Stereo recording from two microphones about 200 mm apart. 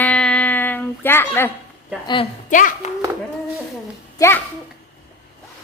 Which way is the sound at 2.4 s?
40° left (ahead or behind).